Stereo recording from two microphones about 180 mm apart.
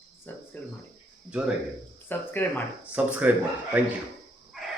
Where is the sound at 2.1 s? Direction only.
10° left (ahead or behind).